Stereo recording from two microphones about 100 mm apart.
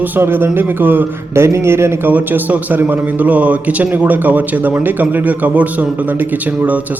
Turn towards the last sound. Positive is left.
turn(degrees=-15)  # may be behind; listen again after turning